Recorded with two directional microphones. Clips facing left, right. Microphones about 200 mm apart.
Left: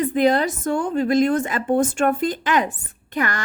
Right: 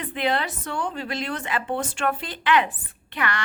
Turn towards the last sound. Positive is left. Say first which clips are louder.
# left 4 dB
turn(degrees=45)  # may be behind; listen again after turning